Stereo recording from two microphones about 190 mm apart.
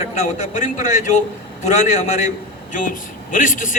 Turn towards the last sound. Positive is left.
turn(degrees=45)  # may be behind; listen again after turning